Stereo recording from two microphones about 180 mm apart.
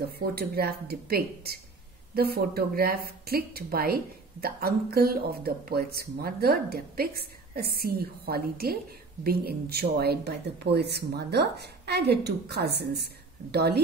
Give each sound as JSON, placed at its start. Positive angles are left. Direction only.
{"t": 0.2, "sound": "a woman's voice", "side_deg": -60}